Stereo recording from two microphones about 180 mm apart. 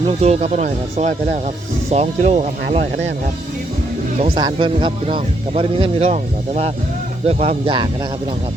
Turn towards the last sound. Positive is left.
turn(degrees=-25)  # may be behind; listen again after turning